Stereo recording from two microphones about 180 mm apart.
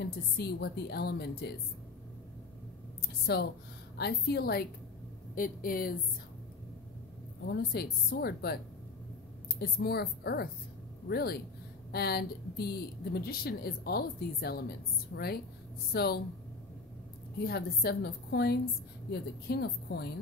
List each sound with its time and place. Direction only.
0.0 s speech: 60° left (ahead or behind)
3.3 s speech: 60° left (ahead or behind)
7.4 s speech: 65° left (ahead or behind)
9.6 s speech: 60° left (ahead or behind)
15.1 s speech: 80° left
15.9 s speech: 60° left (ahead or behind)
17.5 s speech: 60° left (ahead or behind)